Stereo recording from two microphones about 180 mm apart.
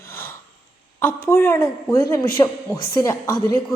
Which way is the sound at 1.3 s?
10° left (ahead or behind).